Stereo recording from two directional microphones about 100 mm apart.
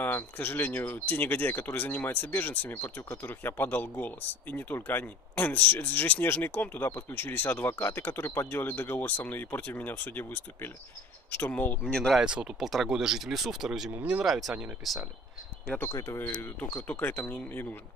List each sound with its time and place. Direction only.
0.0 s speech: 20° left (ahead or behind)
12.2 s speech: 10° right (ahead or behind)
15.9 s speech: 25° left (ahead or behind)
16.3 s speech: 15° left (ahead or behind)